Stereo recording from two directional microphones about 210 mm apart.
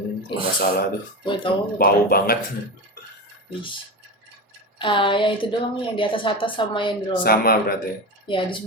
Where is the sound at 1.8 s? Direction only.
45° left (ahead or behind).